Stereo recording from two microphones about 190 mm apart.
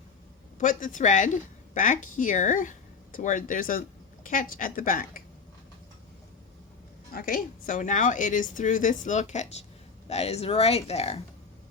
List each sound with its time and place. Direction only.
0.6 s a woman's voice: 45° left (ahead or behind)
7.1 s a woman's voice: 50° left (ahead or behind); by 11.2 s 35° left (ahead or behind)